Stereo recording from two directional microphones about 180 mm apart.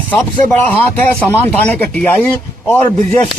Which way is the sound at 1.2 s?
10° left (ahead or behind).